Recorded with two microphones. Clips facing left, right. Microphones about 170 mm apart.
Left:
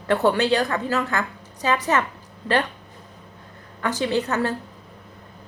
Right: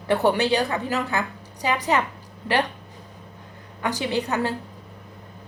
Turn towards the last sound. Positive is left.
turn(degrees=-15)  # may be behind; listen again after turning